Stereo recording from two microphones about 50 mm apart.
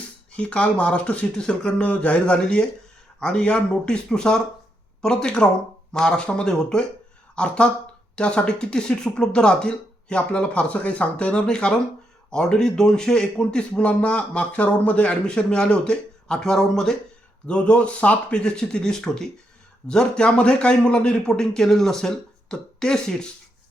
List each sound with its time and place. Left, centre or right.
0.3 s speech: left
1.4 s a man's voice: centre
17.4 s a man's voice: left